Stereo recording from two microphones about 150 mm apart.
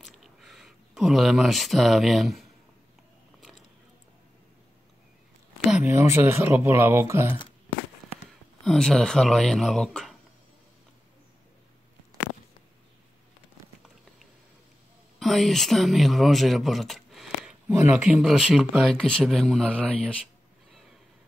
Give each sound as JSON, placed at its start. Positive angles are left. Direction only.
{"t": 0.0, "sound": "a sound", "side_deg": 0}
{"t": 6.0, "sound": "speech", "side_deg": -15}
{"t": 8.6, "sound": "speech", "side_deg": 5}
{"t": 15.1, "sound": "speech", "side_deg": 0}
{"t": 17.6, "sound": "speech", "side_deg": -15}